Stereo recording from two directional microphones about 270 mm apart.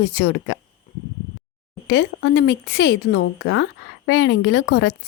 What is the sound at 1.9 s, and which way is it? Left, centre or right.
A woman's voice, left.